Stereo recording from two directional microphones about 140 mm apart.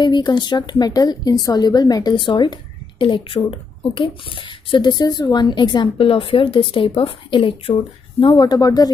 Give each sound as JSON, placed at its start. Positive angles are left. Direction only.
{"t": 0.0, "sound": "a woman's voice", "side_deg": 30}